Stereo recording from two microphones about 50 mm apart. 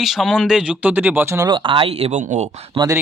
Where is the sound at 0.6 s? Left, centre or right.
Right.